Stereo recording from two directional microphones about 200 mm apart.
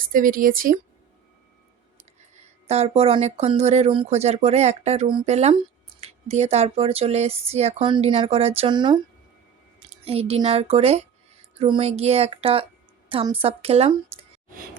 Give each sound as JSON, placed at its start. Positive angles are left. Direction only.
{"t": 0.0, "sound": "speech", "side_deg": -45}
{"t": 2.3, "sound": "speech", "side_deg": -30}